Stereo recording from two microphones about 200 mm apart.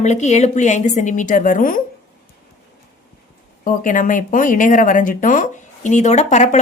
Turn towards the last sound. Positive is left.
turn(degrees=35)  # may be behind; listen again after turning